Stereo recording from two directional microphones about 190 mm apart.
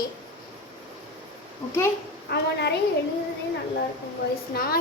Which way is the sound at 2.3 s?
60° left (ahead or behind).